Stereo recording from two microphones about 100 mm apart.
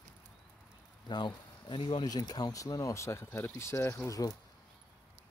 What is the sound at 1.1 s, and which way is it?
Speech, 50° left (ahead or behind).